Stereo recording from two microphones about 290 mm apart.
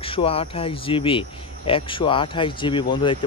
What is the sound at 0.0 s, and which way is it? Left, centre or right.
Speech, centre.